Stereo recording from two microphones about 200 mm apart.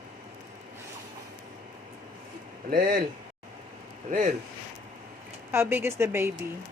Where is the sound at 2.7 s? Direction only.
45° right (ahead or behind).